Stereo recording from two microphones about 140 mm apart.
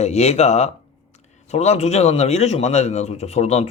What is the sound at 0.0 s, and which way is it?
A man's voice, 50° left (ahead or behind).